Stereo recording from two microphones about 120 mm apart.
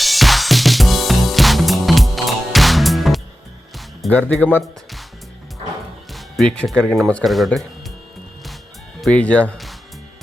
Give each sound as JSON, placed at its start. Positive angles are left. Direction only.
{"t": 0.0, "sound": "music", "side_deg": 0}
{"t": 4.1, "sound": "speech", "side_deg": 10}
{"t": 4.6, "sound": "speech", "side_deg": 0}
{"t": 6.1, "sound": "speech", "side_deg": 5}
{"t": 9.0, "sound": "speech", "side_deg": 10}